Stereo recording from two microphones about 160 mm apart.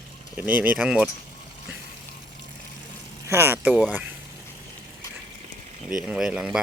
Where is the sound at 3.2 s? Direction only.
15° right (ahead or behind).